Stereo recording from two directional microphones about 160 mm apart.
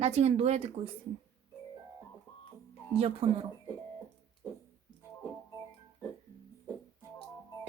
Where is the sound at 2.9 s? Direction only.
40° right (ahead or behind).